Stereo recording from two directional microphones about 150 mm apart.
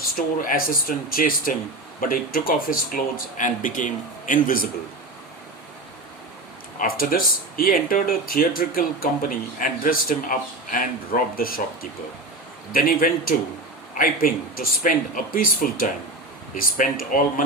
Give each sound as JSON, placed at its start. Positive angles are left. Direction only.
{"t": 0.0, "sound": "speech", "side_deg": 70}
{"t": 6.7, "sound": "speech", "side_deg": 70}
{"t": 12.7, "sound": "speech", "side_deg": 70}